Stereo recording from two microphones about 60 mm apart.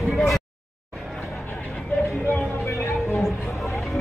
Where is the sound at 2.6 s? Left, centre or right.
Left.